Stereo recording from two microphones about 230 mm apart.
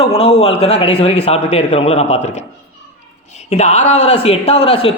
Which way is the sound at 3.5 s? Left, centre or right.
Left.